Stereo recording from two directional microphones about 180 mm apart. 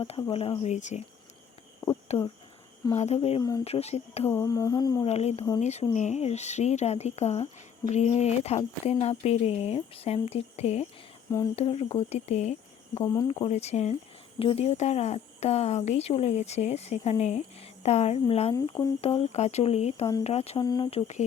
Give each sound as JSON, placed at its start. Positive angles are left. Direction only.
{"t": 0.0, "sound": "speech", "side_deg": 30}
{"t": 2.1, "sound": "speech", "side_deg": 35}
{"t": 4.3, "sound": "humming", "side_deg": 15}
{"t": 5.0, "sound": "speech", "side_deg": 35}
{"t": 20.7, "sound": "humming", "side_deg": 25}